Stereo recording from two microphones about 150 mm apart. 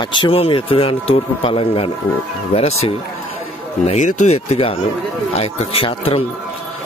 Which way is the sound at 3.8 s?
55° left (ahead or behind).